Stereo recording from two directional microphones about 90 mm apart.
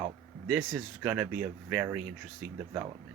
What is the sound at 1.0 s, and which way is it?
Speech, 15° right (ahead or behind).